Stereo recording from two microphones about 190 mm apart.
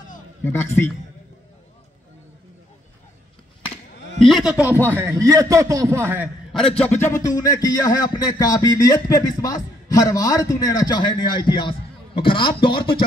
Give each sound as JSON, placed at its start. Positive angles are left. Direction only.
{"t": 0.5, "sound": "a man's voice", "side_deg": 10}
{"t": 4.2, "sound": "a man's voice", "side_deg": 0}
{"t": 6.8, "sound": "music", "side_deg": 10}